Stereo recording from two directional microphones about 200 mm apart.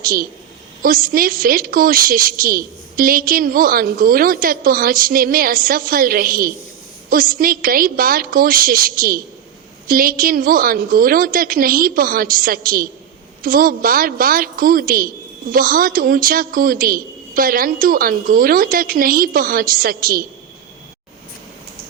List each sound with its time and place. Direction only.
0.0 s a woman's voice: 45° right (ahead or behind)